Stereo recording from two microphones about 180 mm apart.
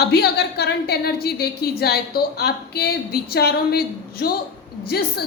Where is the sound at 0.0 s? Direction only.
65° left (ahead or behind).